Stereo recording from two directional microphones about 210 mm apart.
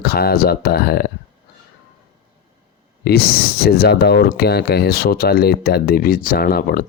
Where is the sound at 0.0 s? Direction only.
45° left (ahead or behind).